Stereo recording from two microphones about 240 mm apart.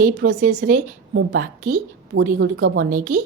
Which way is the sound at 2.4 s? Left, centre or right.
Right.